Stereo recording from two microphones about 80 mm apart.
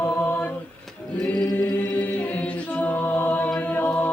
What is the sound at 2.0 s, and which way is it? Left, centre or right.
A capella, left.